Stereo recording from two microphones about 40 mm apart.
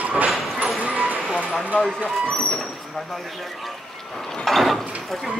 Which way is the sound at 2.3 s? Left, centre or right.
Centre.